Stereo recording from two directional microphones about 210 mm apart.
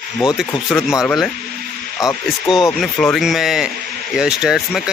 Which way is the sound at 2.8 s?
Centre (ahead or behind).